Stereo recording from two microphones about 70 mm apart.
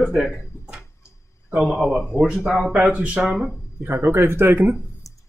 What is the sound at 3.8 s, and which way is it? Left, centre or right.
Speech, right.